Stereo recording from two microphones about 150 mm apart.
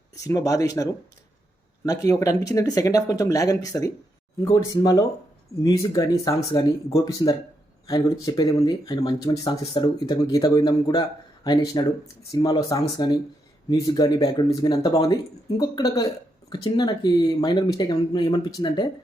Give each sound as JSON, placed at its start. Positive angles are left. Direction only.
{"t": 0.1, "sound": "speech", "side_deg": 20}